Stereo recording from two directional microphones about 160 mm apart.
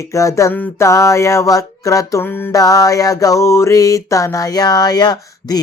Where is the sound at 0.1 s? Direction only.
20° left (ahead or behind).